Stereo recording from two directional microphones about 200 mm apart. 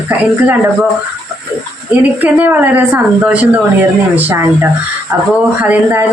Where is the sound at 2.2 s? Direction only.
10° right (ahead or behind).